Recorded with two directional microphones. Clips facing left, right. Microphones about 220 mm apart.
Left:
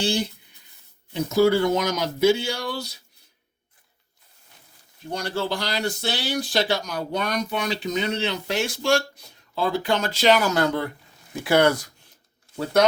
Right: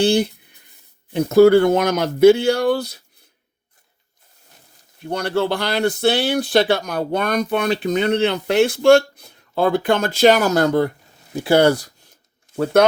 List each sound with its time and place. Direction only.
0.0 s speech: 60° right (ahead or behind)
5.0 s speech: 60° right (ahead or behind); by 10.9 s 45° right (ahead or behind)
11.3 s speech: 30° right (ahead or behind)
12.5 s a sound: 20° right (ahead or behind)